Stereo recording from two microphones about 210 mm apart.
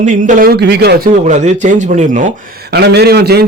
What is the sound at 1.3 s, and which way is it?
Speech, 35° right (ahead or behind).